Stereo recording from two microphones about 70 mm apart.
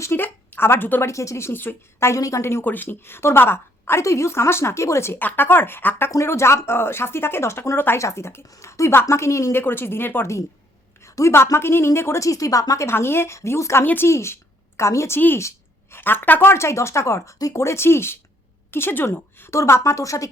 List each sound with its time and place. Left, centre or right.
0.0 s a sound: left
1.0 s a woman's voice: left
2.6 s a woman's voice: left
5.2 s a woman's voice: left
9.6 s a woman's voice: left
11.0 s a sound: left
11.5 s a woman's voice: left
12.9 s a woman's voice: left
13.8 s a woman's voice: left
14.1 s a woman's voice: left